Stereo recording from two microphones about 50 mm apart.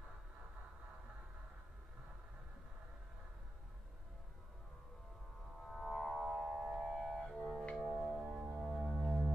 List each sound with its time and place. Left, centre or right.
5.7 s music: centre
7.2 s music: centre
7.8 s music: right
8.5 s music: centre